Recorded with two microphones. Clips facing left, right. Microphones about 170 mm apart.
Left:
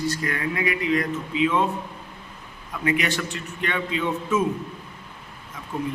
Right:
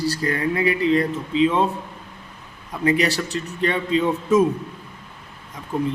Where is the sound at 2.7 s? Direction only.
35° right (ahead or behind).